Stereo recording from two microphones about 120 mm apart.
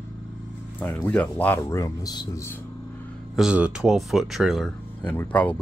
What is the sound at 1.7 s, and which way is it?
Speech, 30° left (ahead or behind).